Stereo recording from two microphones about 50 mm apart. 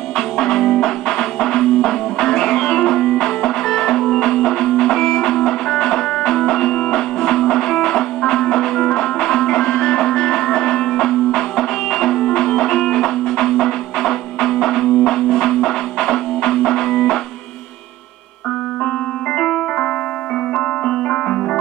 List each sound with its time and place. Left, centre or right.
0.4 s music: centre
19.3 s keyboard: centre
20.5 s music: centre